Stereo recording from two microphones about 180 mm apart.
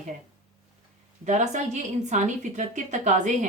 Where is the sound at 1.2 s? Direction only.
40° right (ahead or behind).